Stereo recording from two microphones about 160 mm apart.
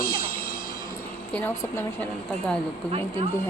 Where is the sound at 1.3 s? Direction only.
10° left (ahead or behind).